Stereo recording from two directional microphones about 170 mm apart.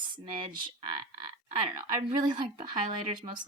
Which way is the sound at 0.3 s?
25° right (ahead or behind).